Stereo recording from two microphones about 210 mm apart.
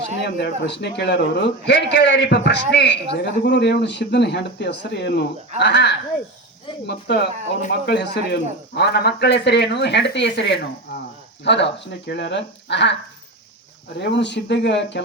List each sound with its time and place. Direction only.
0.2 s a man's voice: 50° left (ahead or behind)
11.4 s speech: 55° left (ahead or behind)
14.0 s speech: 55° left (ahead or behind)